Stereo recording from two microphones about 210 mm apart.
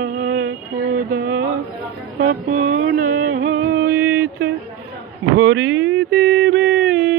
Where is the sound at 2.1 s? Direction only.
40° right (ahead or behind).